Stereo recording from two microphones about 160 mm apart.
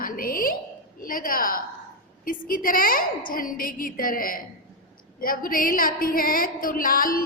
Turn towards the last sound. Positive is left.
turn(degrees=60)  # may be behind; listen again after turning